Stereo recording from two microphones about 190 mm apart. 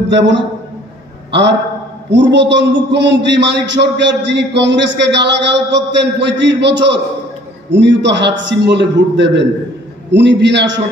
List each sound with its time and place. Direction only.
0.1 s a man's voice: 70° right (ahead or behind)